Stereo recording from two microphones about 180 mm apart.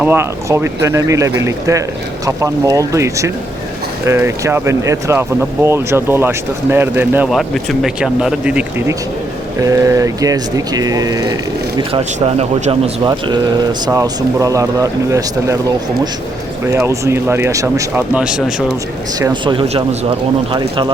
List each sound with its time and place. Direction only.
0.0 s speech: 10° right (ahead or behind)
7.3 s speech: centre (ahead or behind)
9.6 s speech: 20° right (ahead or behind)
11.8 s speech: 30° right (ahead or behind)
13.1 s speech: 25° right (ahead or behind)
16.6 s speech: 15° right (ahead or behind)
19.3 s speech: 25° right (ahead or behind)